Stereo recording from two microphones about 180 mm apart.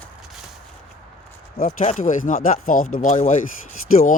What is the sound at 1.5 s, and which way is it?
Speech, 45° left (ahead or behind).